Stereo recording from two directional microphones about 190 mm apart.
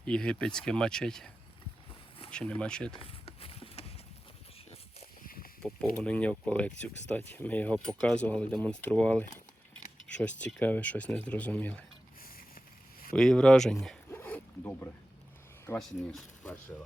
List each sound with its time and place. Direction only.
0.0 s speech: 5° left (ahead or behind)
2.3 s speech: 5° left (ahead or behind)
3.0 s run: 30° left (ahead or behind)
5.2 s a sound: 50° left (ahead or behind)
5.6 s speech: 5° left (ahead or behind)
12.2 s a sound: 50° left (ahead or behind)
13.1 s speech: 5° left (ahead or behind)
14.2 s boat: 10° left (ahead or behind)
15.8 s speech: 5° left (ahead or behind)